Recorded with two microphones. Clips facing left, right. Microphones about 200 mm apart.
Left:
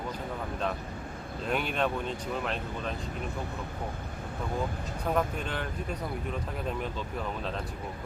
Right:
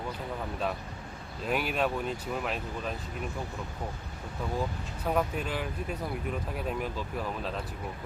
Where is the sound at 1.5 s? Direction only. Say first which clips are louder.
Even; 5° right (ahead or behind).